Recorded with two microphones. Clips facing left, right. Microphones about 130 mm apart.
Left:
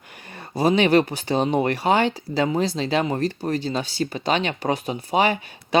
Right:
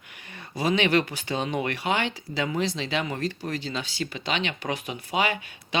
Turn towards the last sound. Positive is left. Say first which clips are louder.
# left 8 dB
turn(degrees=35)  # may be behind; listen again after turning